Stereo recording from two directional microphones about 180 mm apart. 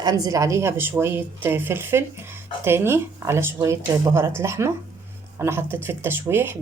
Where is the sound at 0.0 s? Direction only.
20° right (ahead or behind).